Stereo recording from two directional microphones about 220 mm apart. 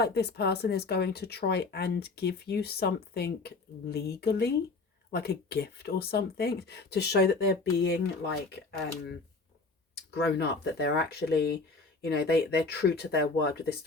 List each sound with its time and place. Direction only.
0.0 s speech: 50° left (ahead or behind)
10.3 s speech: 50° left (ahead or behind)